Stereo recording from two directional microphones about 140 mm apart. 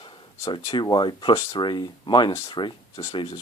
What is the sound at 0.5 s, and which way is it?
Speech, 35° left (ahead or behind).